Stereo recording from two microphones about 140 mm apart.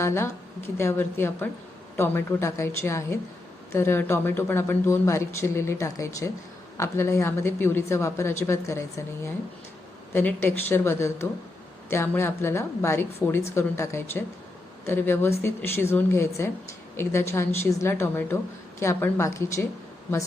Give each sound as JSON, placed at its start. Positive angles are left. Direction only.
{"t": 0.0, "sound": "a woman's voice", "side_deg": 20}